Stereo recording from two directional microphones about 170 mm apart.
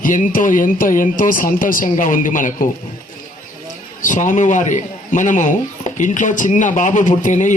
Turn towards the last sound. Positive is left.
turn(degrees=50)  # may be behind; listen again after turning